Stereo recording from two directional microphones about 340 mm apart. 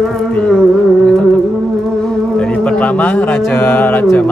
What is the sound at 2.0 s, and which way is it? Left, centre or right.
Speech, centre.